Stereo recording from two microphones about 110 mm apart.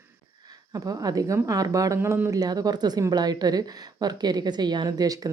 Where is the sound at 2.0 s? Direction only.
20° right (ahead or behind).